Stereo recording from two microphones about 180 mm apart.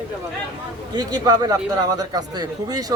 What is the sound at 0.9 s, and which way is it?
Speech, 20° right (ahead or behind).